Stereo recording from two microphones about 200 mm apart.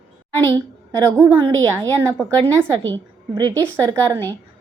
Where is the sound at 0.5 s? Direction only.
15° right (ahead or behind).